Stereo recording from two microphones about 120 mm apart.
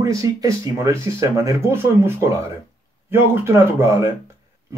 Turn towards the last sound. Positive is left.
turn(degrees=-20)  # may be behind; listen again after turning